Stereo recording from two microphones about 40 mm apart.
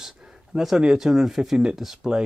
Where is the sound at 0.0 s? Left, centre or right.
Centre.